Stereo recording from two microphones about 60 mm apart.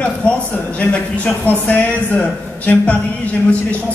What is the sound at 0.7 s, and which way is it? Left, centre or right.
Speech, left.